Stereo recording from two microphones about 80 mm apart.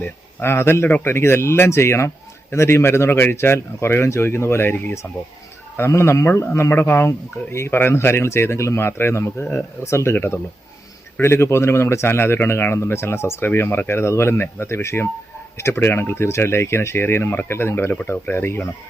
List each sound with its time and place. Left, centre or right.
0.3 s speech: left